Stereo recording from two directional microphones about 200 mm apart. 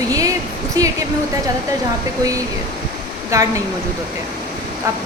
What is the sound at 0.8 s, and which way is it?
Speech, 20° right (ahead or behind).